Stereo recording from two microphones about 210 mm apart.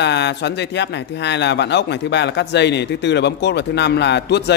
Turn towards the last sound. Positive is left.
turn(degrees=55)  # may be behind; listen again after turning